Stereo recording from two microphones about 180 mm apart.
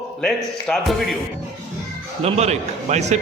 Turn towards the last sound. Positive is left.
turn(degrees=-40)  # may be behind; listen again after turning